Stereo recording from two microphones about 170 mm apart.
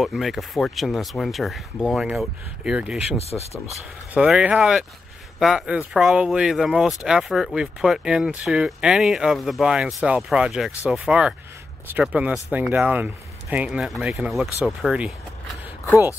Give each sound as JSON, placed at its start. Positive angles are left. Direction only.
{"t": 0.0, "sound": "speech", "side_deg": 0}
{"t": 3.2, "sound": "speech", "side_deg": 40}
{"t": 4.1, "sound": "speech", "side_deg": -5}